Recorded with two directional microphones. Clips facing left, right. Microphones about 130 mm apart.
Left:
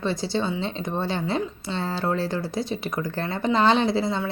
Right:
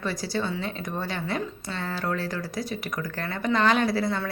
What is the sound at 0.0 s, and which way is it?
A woman's voice, 25° left (ahead or behind).